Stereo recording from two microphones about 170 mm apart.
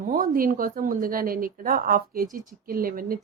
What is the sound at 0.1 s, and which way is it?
Speech, 55° right (ahead or behind).